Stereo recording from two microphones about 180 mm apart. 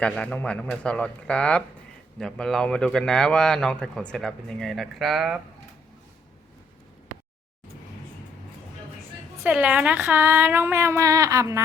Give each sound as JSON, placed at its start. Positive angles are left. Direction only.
{"t": 0.0, "sound": "speech", "side_deg": 5}
{"t": 9.4, "sound": "speech", "side_deg": -5}